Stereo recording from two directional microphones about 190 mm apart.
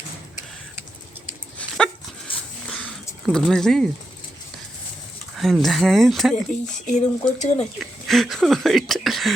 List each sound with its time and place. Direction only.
1.5 s dog: 5° left (ahead or behind)
2.3 s a sound: 30° left (ahead or behind)
2.6 s a sound: centre (ahead or behind)
3.2 s speech: 5° left (ahead or behind)
5.4 s speech: centre (ahead or behind)
6.9 s speech: 40° left (ahead or behind)
7.8 s speech: centre (ahead or behind)